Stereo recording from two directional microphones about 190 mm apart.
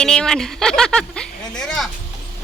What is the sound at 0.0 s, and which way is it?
Speech, 5° left (ahead or behind).